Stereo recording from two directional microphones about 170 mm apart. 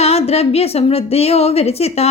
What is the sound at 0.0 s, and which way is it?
Speech, 35° left (ahead or behind).